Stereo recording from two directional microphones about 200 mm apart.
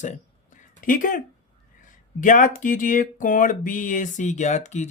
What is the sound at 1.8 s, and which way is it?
Speech, 40° left (ahead or behind).